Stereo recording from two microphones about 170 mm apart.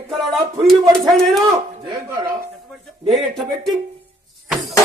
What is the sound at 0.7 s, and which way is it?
Speech, centre (ahead or behind).